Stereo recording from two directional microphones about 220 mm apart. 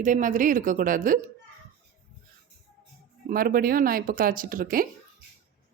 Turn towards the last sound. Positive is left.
turn(degrees=-40)  # may be behind; listen again after turning